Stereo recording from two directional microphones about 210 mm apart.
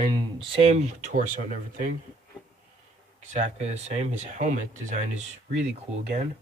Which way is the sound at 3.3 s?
35° right (ahead or behind).